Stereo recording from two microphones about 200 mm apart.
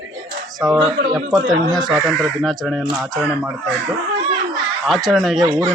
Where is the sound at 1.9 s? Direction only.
Centre (ahead or behind).